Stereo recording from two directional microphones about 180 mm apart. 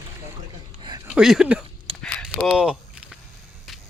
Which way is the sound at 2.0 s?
Centre (ahead or behind).